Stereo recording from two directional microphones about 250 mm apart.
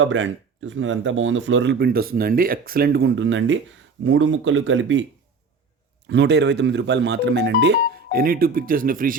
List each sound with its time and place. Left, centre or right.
0.0 s speech: right
6.1 s speech: right